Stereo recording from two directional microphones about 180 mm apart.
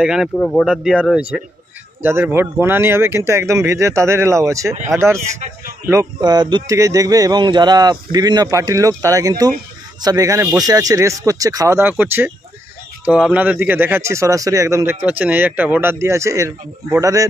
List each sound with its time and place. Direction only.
0.0 s speech: 5° right (ahead or behind)